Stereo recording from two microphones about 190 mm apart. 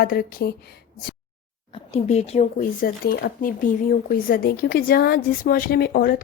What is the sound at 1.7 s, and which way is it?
Speech, 35° left (ahead or behind).